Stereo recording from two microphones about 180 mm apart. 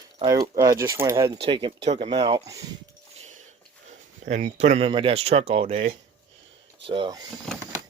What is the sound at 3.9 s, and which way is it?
Speech, 40° right (ahead or behind).